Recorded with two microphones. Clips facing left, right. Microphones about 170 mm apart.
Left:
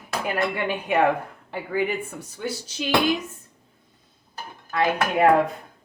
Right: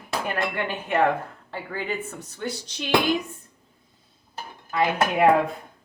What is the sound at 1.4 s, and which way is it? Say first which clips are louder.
Speech: left 6 dB; 15° left (ahead or behind).